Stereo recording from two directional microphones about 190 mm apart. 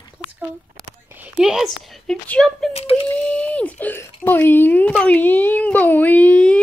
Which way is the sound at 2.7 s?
30° left (ahead or behind).